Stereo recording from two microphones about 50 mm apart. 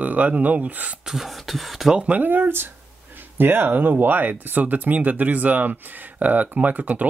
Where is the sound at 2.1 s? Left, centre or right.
Right.